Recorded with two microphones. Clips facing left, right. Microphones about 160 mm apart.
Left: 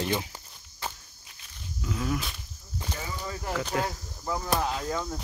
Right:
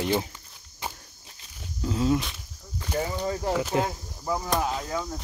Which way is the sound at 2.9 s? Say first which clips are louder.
Right 10 dB; 55° right (ahead or behind).